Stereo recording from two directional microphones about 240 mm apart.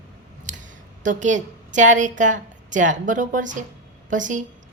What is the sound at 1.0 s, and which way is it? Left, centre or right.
Speech, right.